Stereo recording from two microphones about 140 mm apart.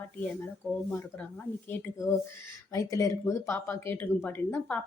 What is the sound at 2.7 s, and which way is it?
A woman's voice, 25° left (ahead or behind).